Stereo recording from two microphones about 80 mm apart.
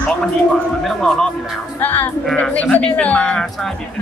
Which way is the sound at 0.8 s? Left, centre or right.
Centre.